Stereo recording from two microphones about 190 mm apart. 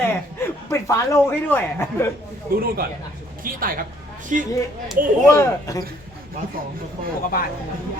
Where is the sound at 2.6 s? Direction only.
50° right (ahead or behind).